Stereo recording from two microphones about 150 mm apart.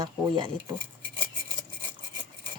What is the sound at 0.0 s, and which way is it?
Speech, 30° right (ahead or behind).